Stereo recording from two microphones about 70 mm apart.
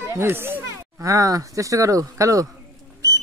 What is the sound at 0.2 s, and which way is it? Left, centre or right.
Speech, right.